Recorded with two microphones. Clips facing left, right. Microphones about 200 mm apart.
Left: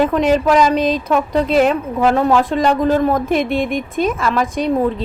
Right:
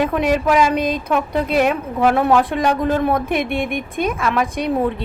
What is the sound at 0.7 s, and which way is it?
Speech, 50° right (ahead or behind).